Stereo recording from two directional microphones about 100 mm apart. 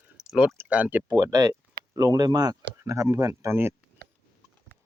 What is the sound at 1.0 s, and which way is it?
Speech, 40° right (ahead or behind).